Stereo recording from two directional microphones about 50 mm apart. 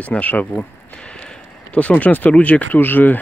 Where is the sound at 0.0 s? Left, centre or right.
Left.